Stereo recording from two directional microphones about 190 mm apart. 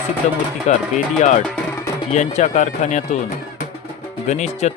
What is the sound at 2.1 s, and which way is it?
Speech, 35° left (ahead or behind).